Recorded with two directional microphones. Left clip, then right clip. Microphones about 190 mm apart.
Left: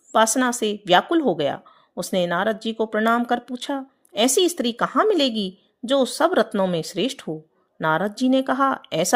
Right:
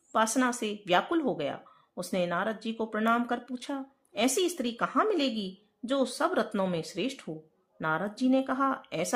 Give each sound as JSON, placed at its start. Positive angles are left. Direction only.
{"t": 0.1, "sound": "a woman's voice", "side_deg": 35}